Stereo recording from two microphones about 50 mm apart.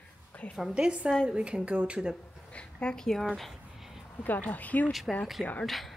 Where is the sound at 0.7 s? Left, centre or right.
Centre.